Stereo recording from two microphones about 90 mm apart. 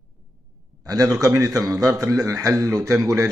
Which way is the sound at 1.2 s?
40° right (ahead or behind).